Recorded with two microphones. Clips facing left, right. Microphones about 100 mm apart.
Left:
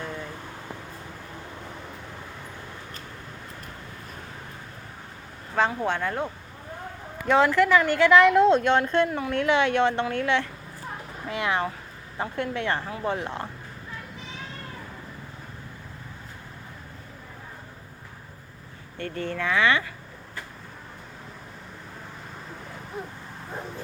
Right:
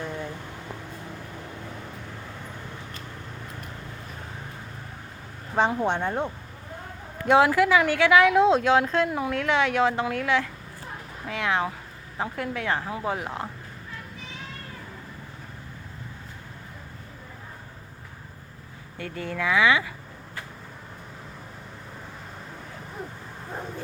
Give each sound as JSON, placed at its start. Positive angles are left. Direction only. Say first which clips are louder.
{"t": 5.5, "sound": "speech", "louder": "right 1 dB", "side_deg": -20}
{"t": 18.9, "sound": "speech", "louder": "left 1 dB", "side_deg": -10}